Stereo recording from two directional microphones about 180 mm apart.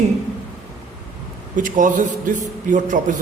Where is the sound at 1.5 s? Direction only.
45° right (ahead or behind).